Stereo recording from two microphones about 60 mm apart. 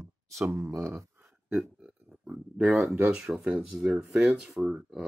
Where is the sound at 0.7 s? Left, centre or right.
Right.